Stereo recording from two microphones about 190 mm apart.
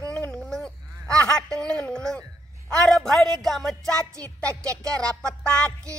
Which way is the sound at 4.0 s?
15° right (ahead or behind).